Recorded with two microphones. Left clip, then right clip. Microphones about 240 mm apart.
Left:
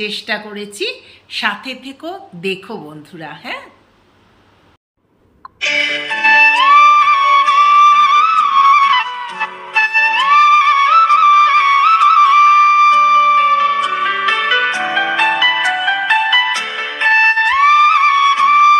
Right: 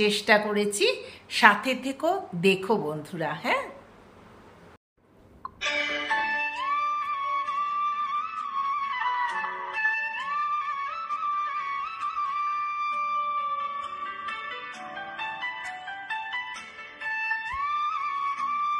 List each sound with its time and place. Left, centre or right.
0.0 s a woman's voice: centre
5.9 s music: left